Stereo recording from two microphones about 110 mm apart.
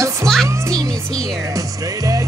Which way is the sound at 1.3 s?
30° right (ahead or behind).